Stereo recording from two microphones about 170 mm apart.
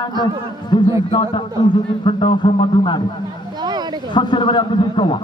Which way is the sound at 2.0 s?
30° left (ahead or behind).